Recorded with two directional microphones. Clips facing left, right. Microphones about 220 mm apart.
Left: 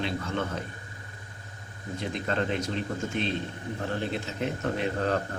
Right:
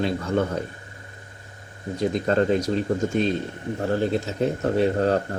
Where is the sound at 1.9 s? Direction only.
40° right (ahead or behind).